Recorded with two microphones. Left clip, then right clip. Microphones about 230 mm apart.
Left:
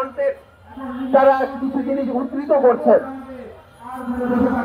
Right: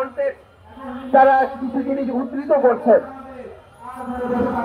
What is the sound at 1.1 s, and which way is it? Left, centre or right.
Speech, left.